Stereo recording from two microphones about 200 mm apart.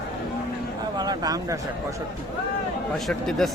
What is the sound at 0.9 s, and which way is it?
Speech, 20° right (ahead or behind).